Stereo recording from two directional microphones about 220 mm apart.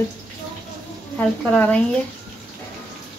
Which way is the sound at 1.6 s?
5° left (ahead or behind).